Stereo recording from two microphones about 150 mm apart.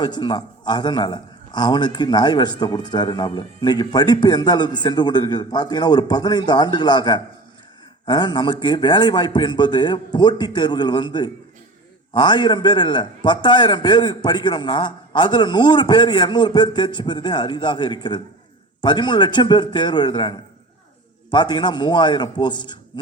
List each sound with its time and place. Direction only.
0.0 s a man's voice: 30° left (ahead or behind)